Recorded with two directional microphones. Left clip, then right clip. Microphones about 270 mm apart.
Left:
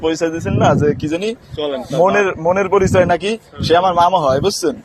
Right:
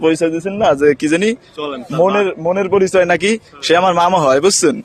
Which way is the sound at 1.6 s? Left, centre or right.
Right.